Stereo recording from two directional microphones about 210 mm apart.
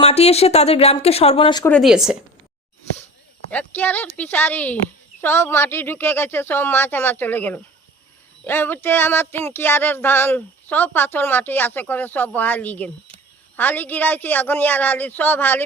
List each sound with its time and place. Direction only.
0.0 s speech: 30° left (ahead or behind)
1.6 s speech: centre (ahead or behind)
3.5 s a sound: 5° left (ahead or behind)